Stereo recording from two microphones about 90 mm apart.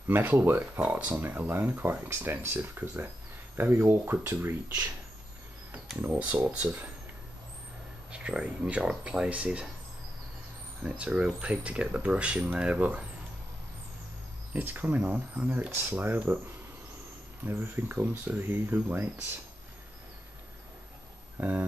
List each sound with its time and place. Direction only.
0.1 s speech: 20° right (ahead or behind)
5.9 s speech: 20° right (ahead or behind)
8.1 s speech: 10° right (ahead or behind)
10.8 s speech: 10° right (ahead or behind)
14.5 s speech: 20° right (ahead or behind)
17.5 s speech: 25° right (ahead or behind)
21.4 s speech: 20° right (ahead or behind)